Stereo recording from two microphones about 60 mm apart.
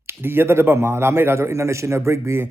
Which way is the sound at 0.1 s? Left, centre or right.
Right.